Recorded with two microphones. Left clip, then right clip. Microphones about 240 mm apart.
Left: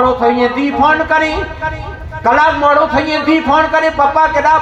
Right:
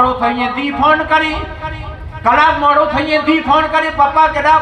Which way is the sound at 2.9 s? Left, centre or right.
Right.